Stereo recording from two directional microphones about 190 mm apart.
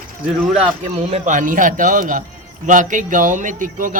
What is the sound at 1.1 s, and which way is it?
Speech, 35° right (ahead or behind).